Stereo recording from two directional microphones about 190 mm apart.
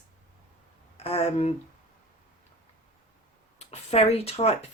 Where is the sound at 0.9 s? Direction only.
30° left (ahead or behind).